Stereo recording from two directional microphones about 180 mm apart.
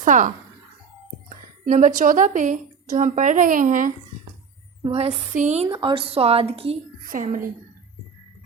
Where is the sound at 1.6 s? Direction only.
45° right (ahead or behind).